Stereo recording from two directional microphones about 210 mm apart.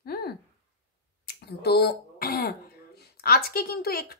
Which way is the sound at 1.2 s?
50° left (ahead or behind).